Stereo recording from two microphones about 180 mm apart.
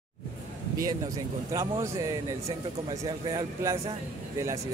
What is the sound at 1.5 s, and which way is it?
A man's voice, 15° right (ahead or behind).